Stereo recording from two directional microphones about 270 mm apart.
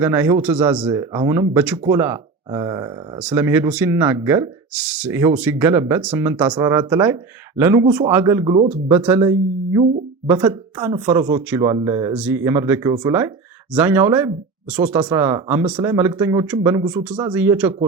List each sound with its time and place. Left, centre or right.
0.0 s speech: centre